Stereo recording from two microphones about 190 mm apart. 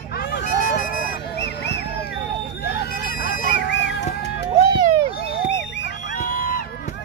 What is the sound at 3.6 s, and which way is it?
Music, 70° left (ahead or behind).